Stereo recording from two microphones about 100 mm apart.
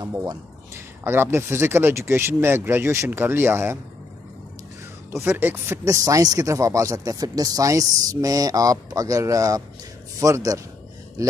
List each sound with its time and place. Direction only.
0.7 s speech: 25° right (ahead or behind)
5.1 s speech: 25° right (ahead or behind)
5.9 s speech: 35° right (ahead or behind)